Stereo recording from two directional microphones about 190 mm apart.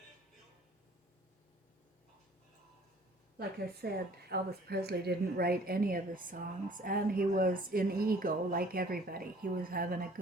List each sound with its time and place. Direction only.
3.3 s speech: 55° right (ahead or behind)